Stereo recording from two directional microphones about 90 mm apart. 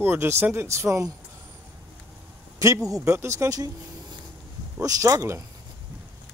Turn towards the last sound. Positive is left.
turn(degrees=-35)  # may be behind; listen again after turning